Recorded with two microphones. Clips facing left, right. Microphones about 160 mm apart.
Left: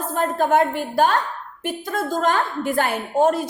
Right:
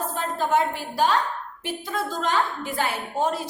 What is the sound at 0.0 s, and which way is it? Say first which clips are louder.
A woman's voice: left 5 dB; 50° left (ahead or behind).